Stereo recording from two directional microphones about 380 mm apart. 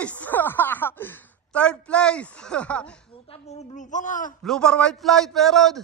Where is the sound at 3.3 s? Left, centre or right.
Centre.